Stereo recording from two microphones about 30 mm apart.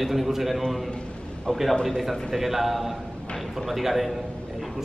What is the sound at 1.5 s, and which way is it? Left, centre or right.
Speech, centre.